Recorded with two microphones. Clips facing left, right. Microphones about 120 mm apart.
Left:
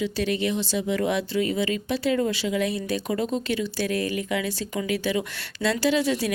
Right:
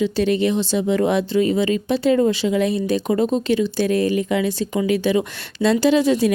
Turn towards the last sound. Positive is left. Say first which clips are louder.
# right 7 dB
turn(degrees=-20)  # may be behind; listen again after turning